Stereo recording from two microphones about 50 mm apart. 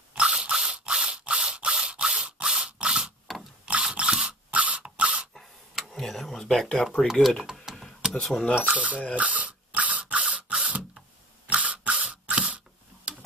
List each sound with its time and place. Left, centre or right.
0.1 s a sound: centre
1.4 s ratchet: centre
3.3 s vehicle: centre
3.9 s a sound: right
5.9 s speech: centre
7.1 s speech: centre
7.7 s a sound: centre
8.1 s speech: centre
8.5 s speech: right
9.1 s ratchet: right